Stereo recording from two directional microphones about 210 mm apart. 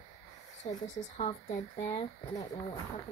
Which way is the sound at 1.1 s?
35° left (ahead or behind).